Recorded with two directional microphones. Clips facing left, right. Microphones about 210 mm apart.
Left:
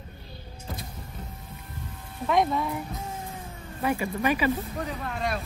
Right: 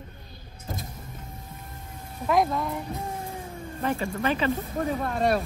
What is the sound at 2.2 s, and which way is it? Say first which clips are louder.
Speech: even; centre (ahead or behind).